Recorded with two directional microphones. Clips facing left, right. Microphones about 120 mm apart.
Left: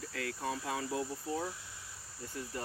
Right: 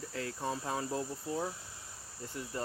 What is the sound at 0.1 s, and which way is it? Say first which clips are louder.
Speech: right 1 dB; 25° right (ahead or behind).